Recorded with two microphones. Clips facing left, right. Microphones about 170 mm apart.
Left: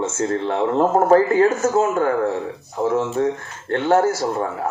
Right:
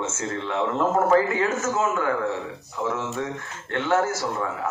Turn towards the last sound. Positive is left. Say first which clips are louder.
# left 5 dB
turn(degrees=35)  # may be behind; listen again after turning